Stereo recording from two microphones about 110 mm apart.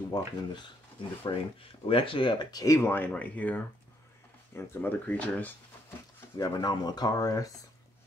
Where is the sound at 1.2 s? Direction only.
55° left (ahead or behind); by 5.5 s 15° left (ahead or behind).